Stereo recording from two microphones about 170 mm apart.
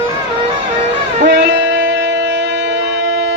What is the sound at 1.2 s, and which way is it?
Music, 75° right (ahead or behind).